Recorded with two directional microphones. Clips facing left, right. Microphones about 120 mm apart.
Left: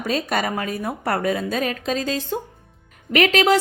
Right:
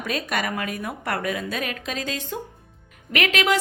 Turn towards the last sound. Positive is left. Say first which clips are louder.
# left 5 dB
turn(degrees=35)  # may be behind; listen again after turning